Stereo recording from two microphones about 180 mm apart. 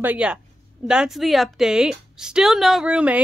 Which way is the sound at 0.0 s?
5° right (ahead or behind).